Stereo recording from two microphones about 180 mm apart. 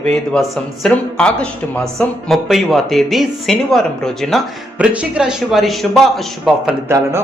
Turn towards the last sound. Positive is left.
turn(degrees=-15)  # may be behind; listen again after turning